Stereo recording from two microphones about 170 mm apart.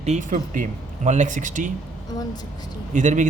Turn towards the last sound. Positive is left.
turn(degrees=-50)  # may be behind; listen again after turning